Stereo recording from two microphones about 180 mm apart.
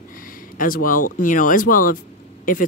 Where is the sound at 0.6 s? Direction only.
50° left (ahead or behind).